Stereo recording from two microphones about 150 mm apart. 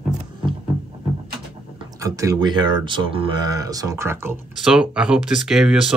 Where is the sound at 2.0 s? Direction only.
20° right (ahead or behind).